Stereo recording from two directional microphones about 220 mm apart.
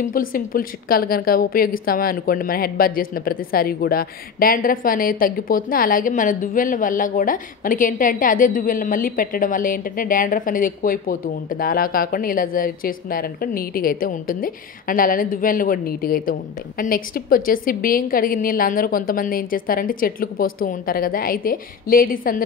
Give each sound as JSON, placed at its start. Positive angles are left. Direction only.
{"t": 0.0, "sound": "a woman's voice", "side_deg": 40}